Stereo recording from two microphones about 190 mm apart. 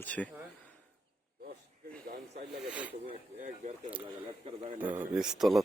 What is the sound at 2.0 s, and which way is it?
Snake, 50° right (ahead or behind).